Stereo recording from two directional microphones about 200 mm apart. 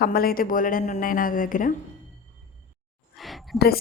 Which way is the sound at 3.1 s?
Centre (ahead or behind).